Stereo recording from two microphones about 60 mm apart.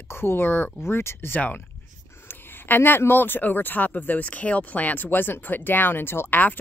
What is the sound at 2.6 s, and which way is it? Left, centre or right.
Speech, left.